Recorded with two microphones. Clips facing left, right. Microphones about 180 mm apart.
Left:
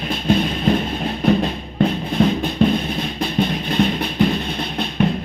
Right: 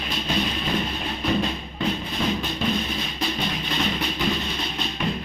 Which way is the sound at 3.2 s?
55° left (ahead or behind).